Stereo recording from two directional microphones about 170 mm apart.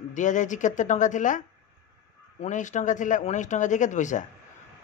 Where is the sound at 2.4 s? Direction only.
45° left (ahead or behind).